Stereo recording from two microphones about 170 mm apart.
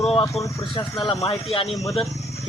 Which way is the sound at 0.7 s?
30° left (ahead or behind).